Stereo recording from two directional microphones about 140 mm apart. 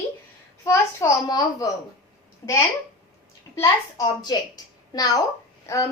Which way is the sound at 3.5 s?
25° left (ahead or behind).